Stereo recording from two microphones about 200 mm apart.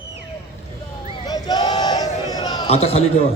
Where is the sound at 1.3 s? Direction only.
20° left (ahead or behind).